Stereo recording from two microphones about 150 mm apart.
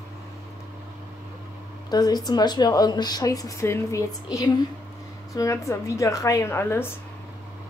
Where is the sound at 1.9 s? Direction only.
25° left (ahead or behind).